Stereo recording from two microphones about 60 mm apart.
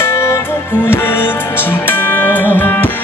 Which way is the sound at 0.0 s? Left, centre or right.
Left.